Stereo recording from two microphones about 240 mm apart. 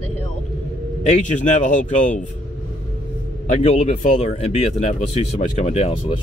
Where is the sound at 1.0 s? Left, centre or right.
Left.